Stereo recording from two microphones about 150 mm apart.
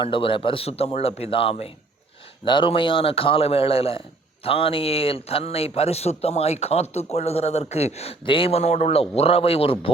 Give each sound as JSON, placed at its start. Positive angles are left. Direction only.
{"t": 0.0, "sound": "a man's voice", "side_deg": 35}